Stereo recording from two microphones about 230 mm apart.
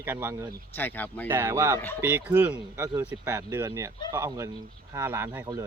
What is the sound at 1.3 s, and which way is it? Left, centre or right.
Speech, centre.